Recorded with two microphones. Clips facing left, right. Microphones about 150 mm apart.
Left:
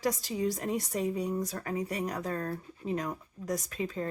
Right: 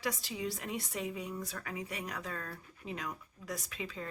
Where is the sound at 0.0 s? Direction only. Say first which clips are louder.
Left 7 dB; 40° left (ahead or behind).